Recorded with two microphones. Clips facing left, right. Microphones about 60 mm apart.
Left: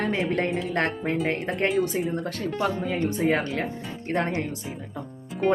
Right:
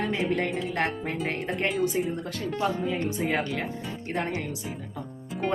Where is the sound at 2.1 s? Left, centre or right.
Left.